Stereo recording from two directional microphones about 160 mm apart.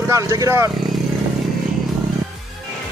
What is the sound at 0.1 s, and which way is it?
Speech, 20° right (ahead or behind).